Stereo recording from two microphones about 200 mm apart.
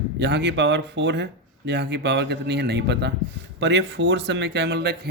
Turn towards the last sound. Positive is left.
turn(degrees=-55)  # may be behind; listen again after turning